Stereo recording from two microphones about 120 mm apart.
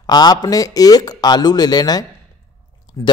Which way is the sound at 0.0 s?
35° left (ahead or behind).